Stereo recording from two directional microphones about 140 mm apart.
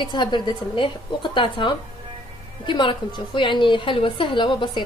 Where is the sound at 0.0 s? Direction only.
35° left (ahead or behind).